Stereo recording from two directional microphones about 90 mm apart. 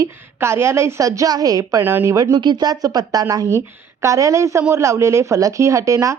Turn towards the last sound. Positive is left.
turn(degrees=-35)  # may be behind; listen again after turning